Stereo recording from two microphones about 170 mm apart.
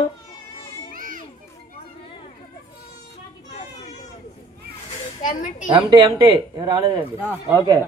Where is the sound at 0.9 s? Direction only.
55° right (ahead or behind).